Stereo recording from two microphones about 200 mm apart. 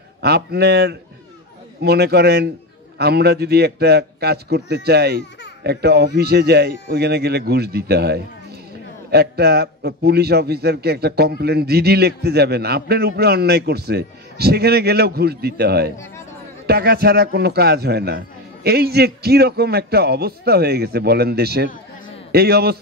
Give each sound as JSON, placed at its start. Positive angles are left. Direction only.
{"t": 0.2, "sound": "a man's voice", "side_deg": -55}